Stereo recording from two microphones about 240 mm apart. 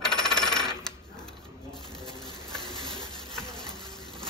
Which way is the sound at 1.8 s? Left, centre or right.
Centre.